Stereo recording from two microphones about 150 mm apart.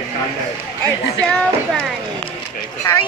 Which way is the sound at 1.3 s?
5° left (ahead or behind).